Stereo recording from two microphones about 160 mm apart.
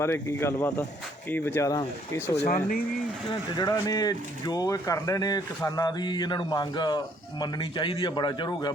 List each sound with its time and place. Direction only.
0.0 s speech: 15° left (ahead or behind)
2.3 s speech: 45° left (ahead or behind)
3.5 s speech: 25° left (ahead or behind)